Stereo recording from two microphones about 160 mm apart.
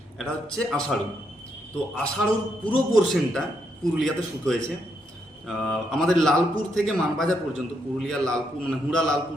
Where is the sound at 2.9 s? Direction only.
5° left (ahead or behind).